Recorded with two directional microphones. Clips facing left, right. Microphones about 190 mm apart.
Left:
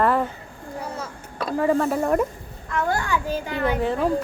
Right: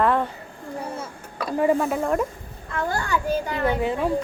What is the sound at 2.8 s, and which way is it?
Speech, 35° right (ahead or behind).